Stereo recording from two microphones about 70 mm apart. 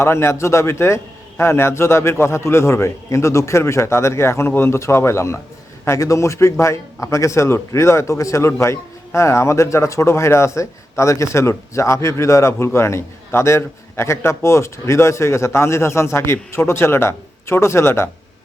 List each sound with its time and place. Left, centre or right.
0.0 s a man's voice: left